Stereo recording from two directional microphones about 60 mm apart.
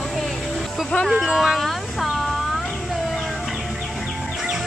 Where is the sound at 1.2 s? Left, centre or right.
Centre.